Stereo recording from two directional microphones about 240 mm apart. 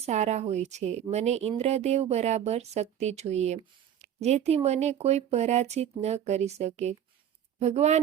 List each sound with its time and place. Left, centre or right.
0.0 s a woman's voice: right